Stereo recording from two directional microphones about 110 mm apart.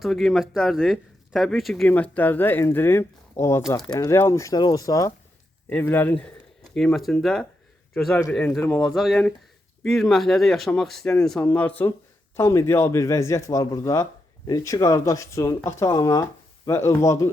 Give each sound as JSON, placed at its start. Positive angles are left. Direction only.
{"t": 0.0, "sound": "speech", "side_deg": 0}
{"t": 1.9, "sound": "speech", "side_deg": 15}
{"t": 5.6, "sound": "speech", "side_deg": 15}
{"t": 6.7, "sound": "speech", "side_deg": 5}